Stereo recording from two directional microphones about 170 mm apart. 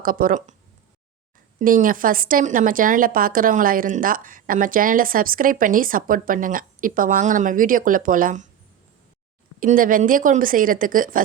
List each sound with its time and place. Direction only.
0.0 s speech: 55° right (ahead or behind)
1.5 s a woman's voice: 55° right (ahead or behind)
9.6 s a woman's voice: 55° right (ahead or behind)